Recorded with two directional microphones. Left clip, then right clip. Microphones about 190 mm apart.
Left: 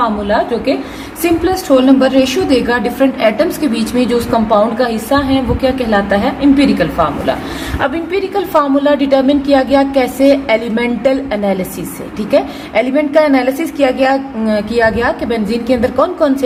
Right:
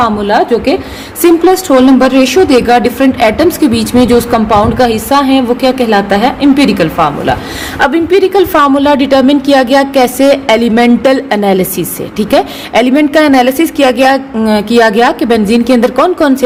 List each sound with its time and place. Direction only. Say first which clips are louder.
0.3 s a woman's voice: right 5 dB; 45° right (ahead or behind)